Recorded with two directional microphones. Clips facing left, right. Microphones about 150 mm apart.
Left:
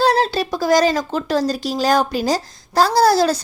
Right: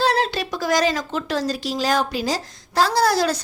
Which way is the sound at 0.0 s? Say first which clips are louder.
Left 4 dB; 40° left (ahead or behind).